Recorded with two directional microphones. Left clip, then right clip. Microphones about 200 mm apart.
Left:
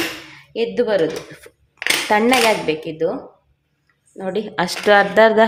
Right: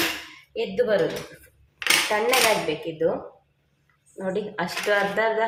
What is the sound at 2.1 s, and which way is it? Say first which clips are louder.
Speech: left 6 dB; 55° left (ahead or behind).